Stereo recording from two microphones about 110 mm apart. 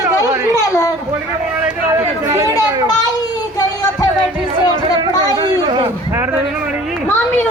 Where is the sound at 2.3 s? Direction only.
25° right (ahead or behind).